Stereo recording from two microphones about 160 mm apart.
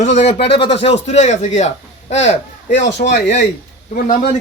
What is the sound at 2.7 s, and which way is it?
Speech, 90° left.